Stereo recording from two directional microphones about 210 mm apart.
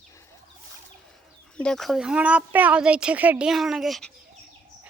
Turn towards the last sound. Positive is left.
turn(degrees=0)  # may be behind; listen again after turning